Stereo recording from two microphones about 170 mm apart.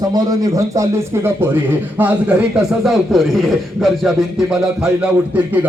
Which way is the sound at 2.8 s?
Centre (ahead or behind).